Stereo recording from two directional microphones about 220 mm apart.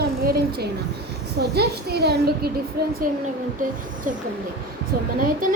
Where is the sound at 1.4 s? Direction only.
50° right (ahead or behind).